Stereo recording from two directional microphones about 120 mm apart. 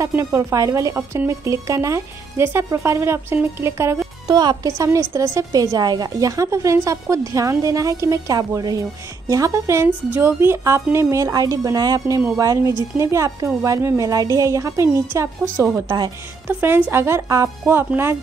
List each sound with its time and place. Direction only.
0.0 s speech: 25° right (ahead or behind)
4.3 s a woman's voice: 35° right (ahead or behind); by 18.1 s 20° right (ahead or behind)